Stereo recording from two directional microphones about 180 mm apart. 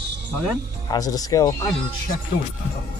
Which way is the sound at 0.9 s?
20° left (ahead or behind).